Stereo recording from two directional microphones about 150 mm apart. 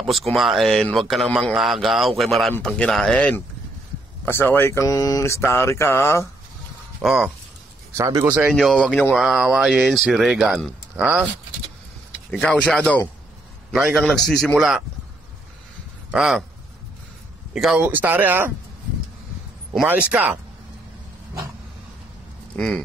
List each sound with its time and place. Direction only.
0.0 s speech: centre (ahead or behind); by 6.2 s 15° left (ahead or behind)
7.0 s speech: centre (ahead or behind)
7.9 s speech: 20° right (ahead or behind)
8.5 s speech: 5° left (ahead or behind)
11.0 s speech: 10° right (ahead or behind)
12.3 s speech: 5° left (ahead or behind)
16.1 s speech: 5° right (ahead or behind)
17.6 s speech: 5° right (ahead or behind)
19.9 s speech: 10° right (ahead or behind)
22.5 s speech: 10° left (ahead or behind)